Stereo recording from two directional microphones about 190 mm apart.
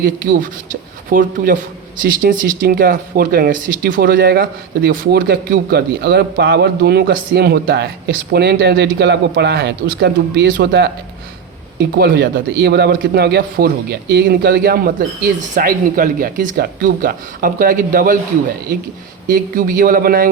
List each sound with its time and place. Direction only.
0.0 s speech: 45° right (ahead or behind)
2.2 s a man's voice: 45° right (ahead or behind)
19.3 s speech: 45° right (ahead or behind)